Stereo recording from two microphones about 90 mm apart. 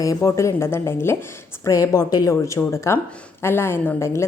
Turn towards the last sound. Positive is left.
turn(degrees=30)  # may be behind; listen again after turning